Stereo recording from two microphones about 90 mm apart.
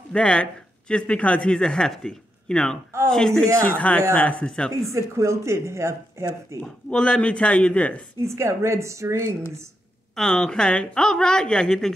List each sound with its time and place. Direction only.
0.1 s speech: 10° left (ahead or behind)
3.6 s speech: 15° left (ahead or behind)
4.9 s speech: 35° right (ahead or behind)
6.6 s speech: 10° left (ahead or behind)
8.2 s speech: 30° right (ahead or behind)
10.1 s speech: 5° left (ahead or behind)